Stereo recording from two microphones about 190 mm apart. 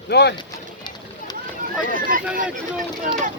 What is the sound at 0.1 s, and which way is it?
Speech, 60° left (ahead or behind).